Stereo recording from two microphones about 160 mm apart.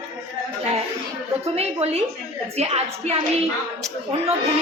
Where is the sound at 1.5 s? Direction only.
40° right (ahead or behind).